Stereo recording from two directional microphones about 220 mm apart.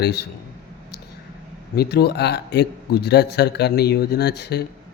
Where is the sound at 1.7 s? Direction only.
45° left (ahead or behind).